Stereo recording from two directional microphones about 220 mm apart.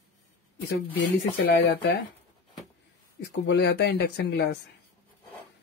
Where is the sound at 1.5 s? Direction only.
50° left (ahead or behind).